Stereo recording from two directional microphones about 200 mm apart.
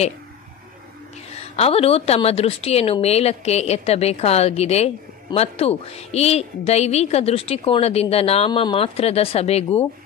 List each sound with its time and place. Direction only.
1.3 s a woman's voice: 30° left (ahead or behind)